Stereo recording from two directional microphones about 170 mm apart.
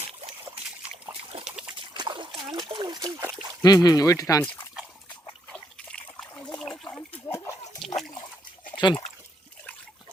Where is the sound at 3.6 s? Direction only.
20° left (ahead or behind).